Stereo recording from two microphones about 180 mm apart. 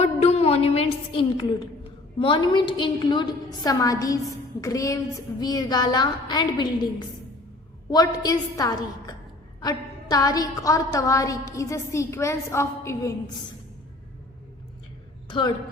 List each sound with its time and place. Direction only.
0.0 s a sound: 35° left (ahead or behind)
2.1 s a woman's voice: 25° left (ahead or behind)
7.9 s a woman's voice: 20° left (ahead or behind)
15.3 s a woman's voice: 25° left (ahead or behind)